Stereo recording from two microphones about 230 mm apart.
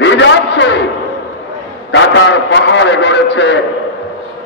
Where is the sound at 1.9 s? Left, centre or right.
Left.